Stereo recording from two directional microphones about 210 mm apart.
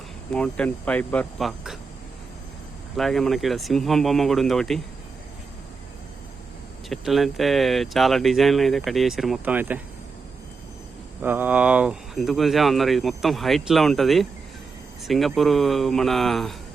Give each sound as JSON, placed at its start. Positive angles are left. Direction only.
{"t": 0.3, "sound": "speech", "side_deg": 5}
{"t": 2.9, "sound": "speech", "side_deg": 0}
{"t": 6.8, "sound": "speech", "side_deg": 0}
{"t": 11.2, "sound": "speech", "side_deg": -10}